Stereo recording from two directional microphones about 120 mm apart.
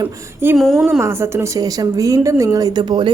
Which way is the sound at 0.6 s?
Centre (ahead or behind).